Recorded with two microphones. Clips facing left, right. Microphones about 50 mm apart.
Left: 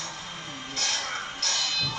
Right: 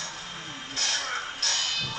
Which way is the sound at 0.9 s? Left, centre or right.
Right.